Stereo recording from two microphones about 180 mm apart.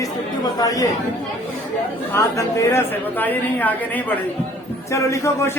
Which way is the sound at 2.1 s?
15° left (ahead or behind).